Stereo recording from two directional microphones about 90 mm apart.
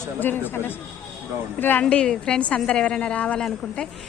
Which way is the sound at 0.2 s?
20° left (ahead or behind).